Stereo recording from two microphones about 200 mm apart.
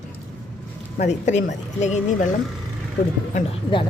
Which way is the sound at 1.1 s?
35° left (ahead or behind).